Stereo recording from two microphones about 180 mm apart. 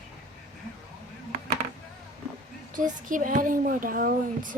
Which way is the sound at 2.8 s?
45° right (ahead or behind).